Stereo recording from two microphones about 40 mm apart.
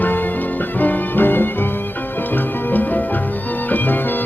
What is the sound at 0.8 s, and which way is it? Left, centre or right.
Music, left.